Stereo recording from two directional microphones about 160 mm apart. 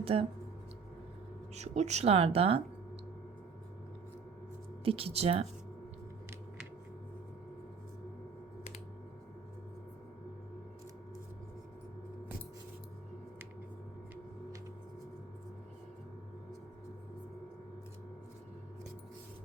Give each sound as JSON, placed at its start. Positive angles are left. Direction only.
{"t": 0.0, "sound": "speech", "side_deg": -35}
{"t": 1.5, "sound": "speech", "side_deg": -45}
{"t": 4.9, "sound": "speech", "side_deg": -40}